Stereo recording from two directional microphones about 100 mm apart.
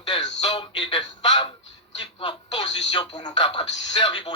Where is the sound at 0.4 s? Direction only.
60° left (ahead or behind).